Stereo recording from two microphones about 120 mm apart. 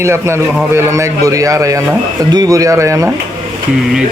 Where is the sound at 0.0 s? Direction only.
20° right (ahead or behind).